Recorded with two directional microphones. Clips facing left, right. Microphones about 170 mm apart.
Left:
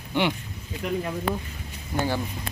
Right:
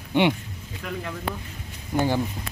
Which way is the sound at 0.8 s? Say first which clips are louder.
Left 5 dB; 25° left (ahead or behind).